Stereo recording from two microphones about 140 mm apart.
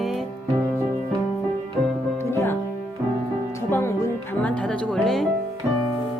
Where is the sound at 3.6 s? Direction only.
15° left (ahead or behind); by 5.3 s centre (ahead or behind).